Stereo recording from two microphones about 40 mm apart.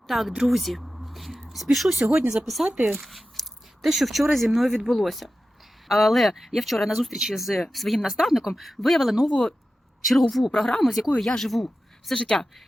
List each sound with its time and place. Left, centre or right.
0.1 s speech: centre
0.4 s a sound: centre
1.7 s speech: centre
12.1 s speech: left